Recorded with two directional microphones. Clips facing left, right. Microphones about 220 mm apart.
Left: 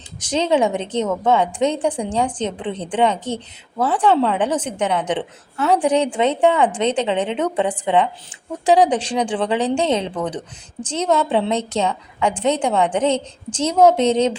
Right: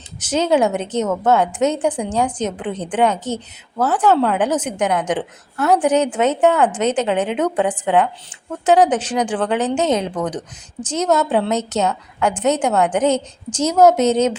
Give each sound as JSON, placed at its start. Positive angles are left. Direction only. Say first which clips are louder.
{"t": 0.2, "sound": "a woman's voice", "louder": "right 1 dB", "side_deg": -5}